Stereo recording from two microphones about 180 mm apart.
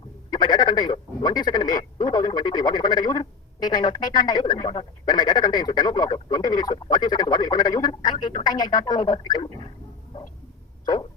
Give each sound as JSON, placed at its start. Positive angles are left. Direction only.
{"t": 0.3, "sound": "speech", "side_deg": 25}